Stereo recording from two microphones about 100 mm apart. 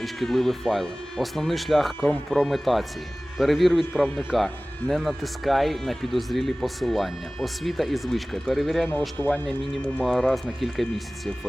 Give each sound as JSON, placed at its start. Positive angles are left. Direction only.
{"t": 0.0, "sound": "speech", "side_deg": 0}
{"t": 2.0, "sound": "speech", "side_deg": 15}
{"t": 2.3, "sound": "speech", "side_deg": 0}
{"t": 8.9, "sound": "speech", "side_deg": 20}